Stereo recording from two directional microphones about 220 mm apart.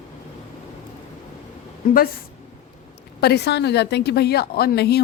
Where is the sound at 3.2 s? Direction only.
45° left (ahead or behind).